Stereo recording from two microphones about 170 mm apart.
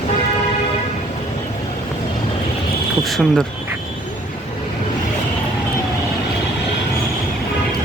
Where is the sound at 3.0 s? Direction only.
Centre (ahead or behind).